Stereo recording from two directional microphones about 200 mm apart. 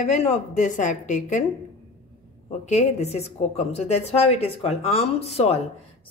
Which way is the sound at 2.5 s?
35° left (ahead or behind).